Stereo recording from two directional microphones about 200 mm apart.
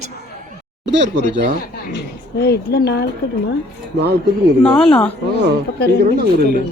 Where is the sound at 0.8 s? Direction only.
65° right (ahead or behind).